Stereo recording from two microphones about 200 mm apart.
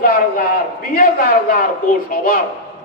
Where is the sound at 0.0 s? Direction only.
45° left (ahead or behind).